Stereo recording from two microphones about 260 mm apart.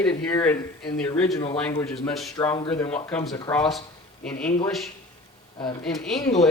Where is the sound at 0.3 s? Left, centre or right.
Centre.